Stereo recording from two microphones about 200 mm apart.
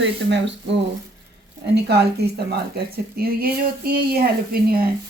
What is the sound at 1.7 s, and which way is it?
A woman's voice, 55° right (ahead or behind).